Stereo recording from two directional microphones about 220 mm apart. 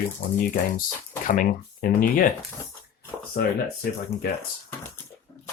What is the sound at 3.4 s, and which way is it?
Speech, 40° left (ahead or behind).